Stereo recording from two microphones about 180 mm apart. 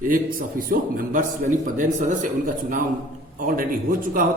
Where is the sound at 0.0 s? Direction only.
50° right (ahead or behind).